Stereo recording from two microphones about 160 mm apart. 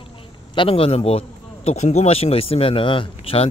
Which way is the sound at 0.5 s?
35° left (ahead or behind).